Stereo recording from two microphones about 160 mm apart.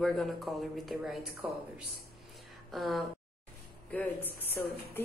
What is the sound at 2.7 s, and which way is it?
Speech, centre (ahead or behind).